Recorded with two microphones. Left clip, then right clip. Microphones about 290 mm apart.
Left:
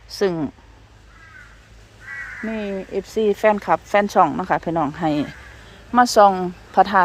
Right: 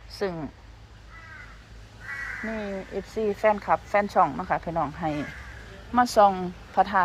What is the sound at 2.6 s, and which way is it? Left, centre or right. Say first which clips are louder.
Speech: left 7 dB; left.